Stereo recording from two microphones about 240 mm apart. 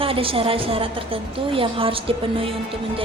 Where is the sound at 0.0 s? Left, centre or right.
Right.